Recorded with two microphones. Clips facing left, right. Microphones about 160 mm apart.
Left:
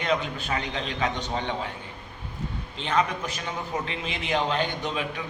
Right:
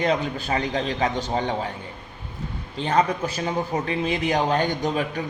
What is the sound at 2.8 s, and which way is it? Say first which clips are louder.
A man's voice: right 4 dB; 40° right (ahead or behind).